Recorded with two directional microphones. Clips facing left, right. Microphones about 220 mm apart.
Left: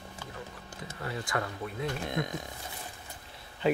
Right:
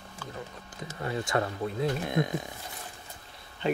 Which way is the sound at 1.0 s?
25° right (ahead or behind).